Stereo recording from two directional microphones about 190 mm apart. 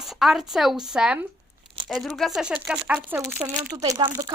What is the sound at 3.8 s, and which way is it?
Speech, 25° right (ahead or behind).